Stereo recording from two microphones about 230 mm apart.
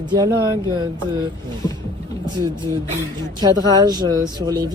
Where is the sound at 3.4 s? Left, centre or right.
Centre.